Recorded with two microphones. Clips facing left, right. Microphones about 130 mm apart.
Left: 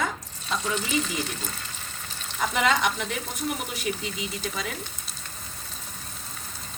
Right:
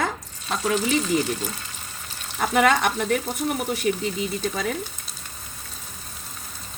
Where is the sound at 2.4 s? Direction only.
55° right (ahead or behind).